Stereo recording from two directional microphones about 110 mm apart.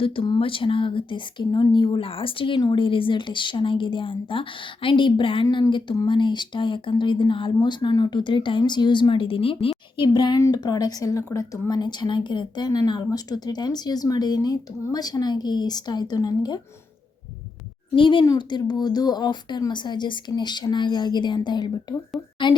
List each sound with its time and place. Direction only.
0.3 s speech: 55° left (ahead or behind)
10.1 s speech: 40° left (ahead or behind)
17.9 s speech: 50° left (ahead or behind)